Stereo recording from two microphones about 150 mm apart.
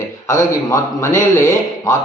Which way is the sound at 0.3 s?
20° left (ahead or behind).